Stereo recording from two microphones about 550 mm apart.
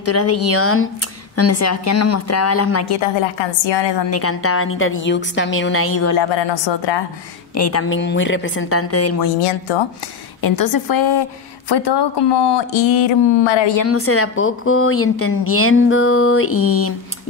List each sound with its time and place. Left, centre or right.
0.0 s a woman's voice: left
3.0 s a woman's voice: left
4.1 s a woman's voice: left
6.7 s a woman's voice: left
7.5 s a woman's voice: left
10.4 s a woman's voice: left
13.7 s a woman's voice: left